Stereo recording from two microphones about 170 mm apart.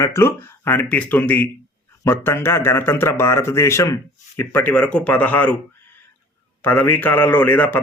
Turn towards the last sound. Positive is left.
turn(degrees=10)  # may be behind; listen again after turning